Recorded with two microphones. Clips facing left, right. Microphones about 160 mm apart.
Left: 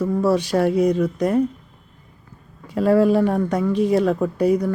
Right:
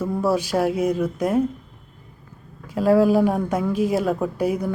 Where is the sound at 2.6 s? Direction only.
Centre (ahead or behind).